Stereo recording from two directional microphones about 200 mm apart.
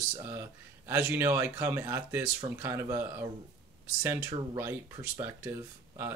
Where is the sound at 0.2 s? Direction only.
10° right (ahead or behind).